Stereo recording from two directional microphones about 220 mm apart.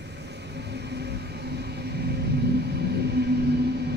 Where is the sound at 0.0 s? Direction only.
50° right (ahead or behind).